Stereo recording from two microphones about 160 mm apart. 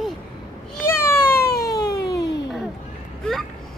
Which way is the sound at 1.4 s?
75° left (ahead or behind).